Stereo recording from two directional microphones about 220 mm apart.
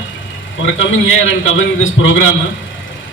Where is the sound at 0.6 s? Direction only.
60° left (ahead or behind).